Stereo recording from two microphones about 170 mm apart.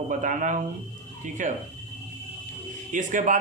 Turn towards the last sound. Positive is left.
turn(degrees=-50)  # may be behind; listen again after turning